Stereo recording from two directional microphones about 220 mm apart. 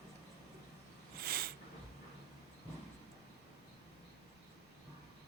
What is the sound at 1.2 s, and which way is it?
Cat, 45° right (ahead or behind).